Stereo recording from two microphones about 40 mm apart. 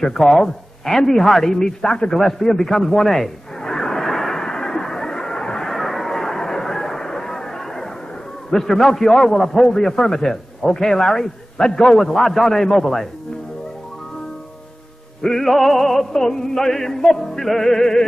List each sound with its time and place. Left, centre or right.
0.0 s a man's voice: centre
2.1 s a sound: centre
5.7 s vehicle: centre
8.5 s a man's voice: centre
11.9 s a man's voice: centre
15.2 s a man's voice: centre